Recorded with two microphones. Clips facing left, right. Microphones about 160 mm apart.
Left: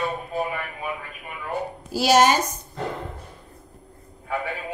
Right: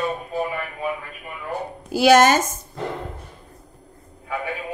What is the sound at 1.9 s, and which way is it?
Speech, 55° right (ahead or behind).